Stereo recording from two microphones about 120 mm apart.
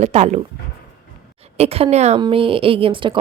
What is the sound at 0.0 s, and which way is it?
Speech, 70° right (ahead or behind).